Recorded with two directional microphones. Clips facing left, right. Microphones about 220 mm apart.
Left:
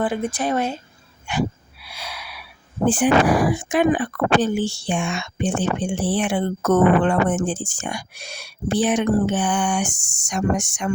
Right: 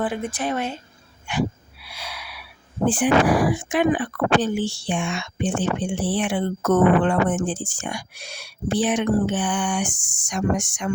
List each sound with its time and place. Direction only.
0.0 s speech: 35° left (ahead or behind)
2.0 s gasp: 40° left (ahead or behind)
2.8 s speech: 40° left (ahead or behind)